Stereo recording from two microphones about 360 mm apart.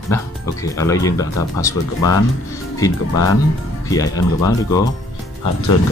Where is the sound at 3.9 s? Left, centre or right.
Centre.